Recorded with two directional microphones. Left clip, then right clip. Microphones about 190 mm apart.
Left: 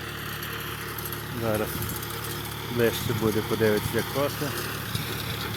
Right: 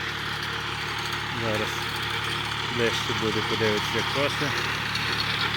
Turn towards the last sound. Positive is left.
turn(degrees=30)  # may be behind; listen again after turning